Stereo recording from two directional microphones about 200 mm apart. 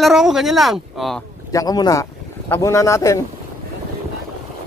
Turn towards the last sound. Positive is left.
turn(degrees=15)  # may be behind; listen again after turning